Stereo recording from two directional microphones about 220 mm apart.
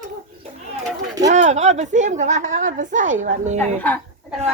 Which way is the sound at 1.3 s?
30° right (ahead or behind).